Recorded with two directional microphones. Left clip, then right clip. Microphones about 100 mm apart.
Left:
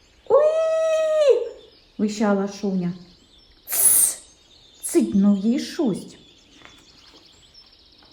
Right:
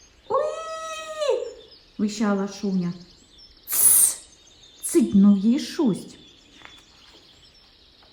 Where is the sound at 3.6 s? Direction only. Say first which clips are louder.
Even; centre (ahead or behind).